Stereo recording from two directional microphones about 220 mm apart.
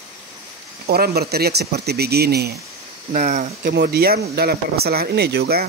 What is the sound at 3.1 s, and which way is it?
Speech, 35° right (ahead or behind).